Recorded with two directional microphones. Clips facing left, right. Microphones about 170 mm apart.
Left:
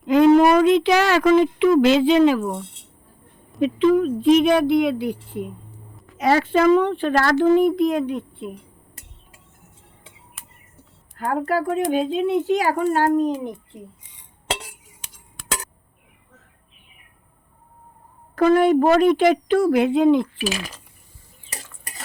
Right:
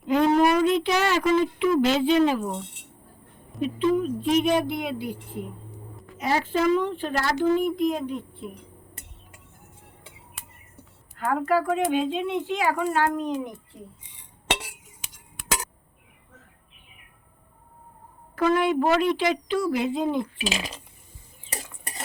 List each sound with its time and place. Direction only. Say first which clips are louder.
0.1 s speech: left 6 dB; 90° left
3.6 s speech: left 6 dB; 90° left
6.1 s speech: left 7 dB; 75° left (ahead or behind)
7.5 s speech: left 6 dB; 70° left (ahead or behind)
10.4 s a sound: right 1 dB; centre (ahead or behind)
11.3 s speech: left 1 dB; 35° left (ahead or behind)
13.7 s speech: left 3 dB; 20° left (ahead or behind)
18.3 s speech: left 6 dB; 45° left (ahead or behind); by 20.4 s 85° left
20.5 s cutlery: left 2 dB; 20° right (ahead or behind)